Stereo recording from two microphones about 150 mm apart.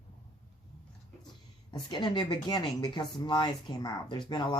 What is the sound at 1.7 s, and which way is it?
Speech, 30° left (ahead or behind).